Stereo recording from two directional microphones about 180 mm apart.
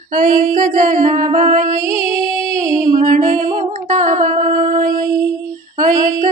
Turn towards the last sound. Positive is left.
turn(degrees=-50)  # may be behind; listen again after turning